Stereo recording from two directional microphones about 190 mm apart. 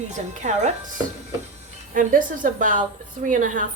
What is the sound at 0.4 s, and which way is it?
Speech, 40° right (ahead or behind).